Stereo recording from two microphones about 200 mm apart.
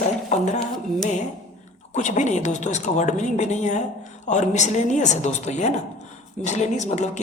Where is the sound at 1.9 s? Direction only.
35° left (ahead or behind).